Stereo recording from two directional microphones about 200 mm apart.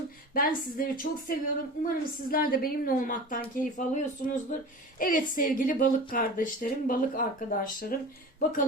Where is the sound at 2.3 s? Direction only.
45° left (ahead or behind).